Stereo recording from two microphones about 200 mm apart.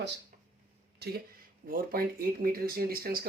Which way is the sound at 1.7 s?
45° right (ahead or behind).